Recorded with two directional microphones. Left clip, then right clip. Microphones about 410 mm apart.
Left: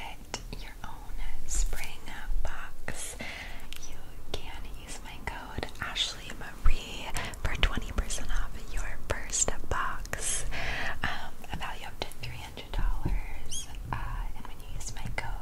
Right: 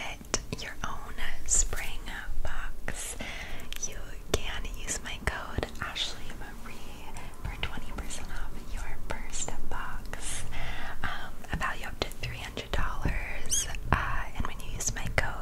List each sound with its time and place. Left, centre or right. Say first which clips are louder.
0.0 s whispering: right 5 dB; right
1.6 s whispering: right 6 dB; centre
2.0 s whispering: right 2 dB; centre
3.7 s whispering: right 7 dB; right
5.8 s whispering: left 4 dB; centre
7.2 s whispering: left 7 dB; left; by 11.2 s centre
11.5 s whispering: right 6 dB; centre